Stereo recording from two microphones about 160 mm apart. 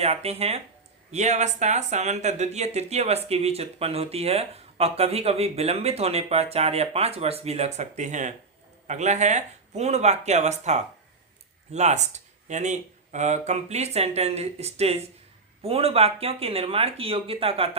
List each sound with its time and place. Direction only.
0.0 s speech: 40° right (ahead or behind)